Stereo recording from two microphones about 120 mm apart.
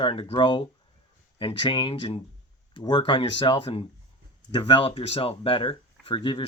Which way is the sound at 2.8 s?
40° left (ahead or behind).